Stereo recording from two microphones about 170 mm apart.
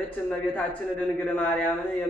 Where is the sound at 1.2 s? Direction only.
10° left (ahead or behind).